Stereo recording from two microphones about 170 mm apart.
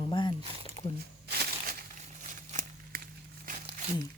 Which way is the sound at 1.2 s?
65° right (ahead or behind).